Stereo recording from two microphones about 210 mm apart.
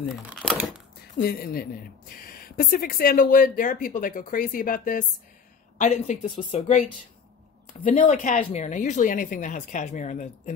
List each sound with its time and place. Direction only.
0.3 s speech: 5° right (ahead or behind)
1.2 s speech: 45° left (ahead or behind)
7.8 s speech: 35° left (ahead or behind)